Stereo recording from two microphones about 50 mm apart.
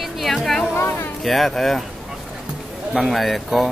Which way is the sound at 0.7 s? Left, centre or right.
Left.